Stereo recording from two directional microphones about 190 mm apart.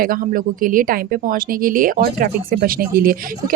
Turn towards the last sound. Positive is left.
turn(degrees=-50)  # may be behind; listen again after turning